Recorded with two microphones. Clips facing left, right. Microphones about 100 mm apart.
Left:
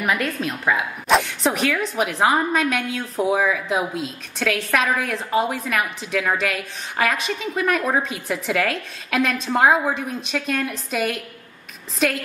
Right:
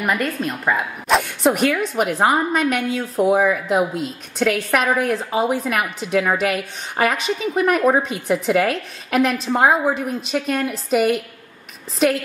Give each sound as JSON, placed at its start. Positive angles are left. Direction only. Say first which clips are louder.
{"t": 0.0, "sound": "a woman's voice", "louder": "right 1 dB", "side_deg": 0}
{"t": 5.9, "sound": "a woman's voice", "louder": "right 5 dB", "side_deg": -55}
{"t": 6.2, "sound": "a woman's voice", "louder": "right 3 dB", "side_deg": -5}